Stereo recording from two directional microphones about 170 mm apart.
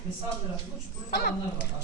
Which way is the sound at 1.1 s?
70° left (ahead or behind).